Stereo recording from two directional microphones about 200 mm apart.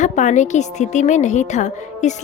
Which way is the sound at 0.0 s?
35° left (ahead or behind).